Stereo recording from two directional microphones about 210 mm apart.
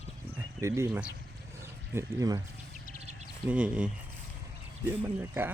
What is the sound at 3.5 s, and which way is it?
Speech, 5° right (ahead or behind).